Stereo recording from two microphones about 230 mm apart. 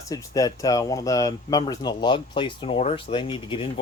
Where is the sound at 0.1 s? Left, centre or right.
Centre.